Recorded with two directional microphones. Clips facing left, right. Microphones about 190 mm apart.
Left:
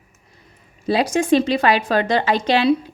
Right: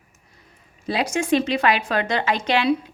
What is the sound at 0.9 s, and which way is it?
A woman's voice, 35° left (ahead or behind).